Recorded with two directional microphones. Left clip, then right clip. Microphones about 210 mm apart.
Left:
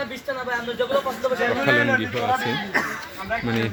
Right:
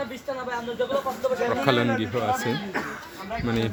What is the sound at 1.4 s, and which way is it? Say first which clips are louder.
Speech: left 4 dB; 20° right (ahead or behind).